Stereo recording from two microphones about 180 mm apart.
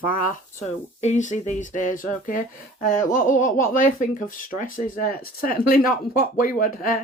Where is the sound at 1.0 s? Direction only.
40° left (ahead or behind).